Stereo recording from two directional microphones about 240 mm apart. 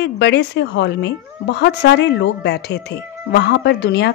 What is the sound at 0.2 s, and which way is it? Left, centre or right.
Speech, left.